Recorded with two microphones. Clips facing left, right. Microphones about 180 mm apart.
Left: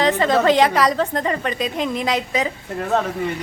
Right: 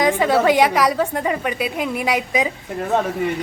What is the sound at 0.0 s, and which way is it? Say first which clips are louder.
A woman's voice: even; 10° right (ahead or behind).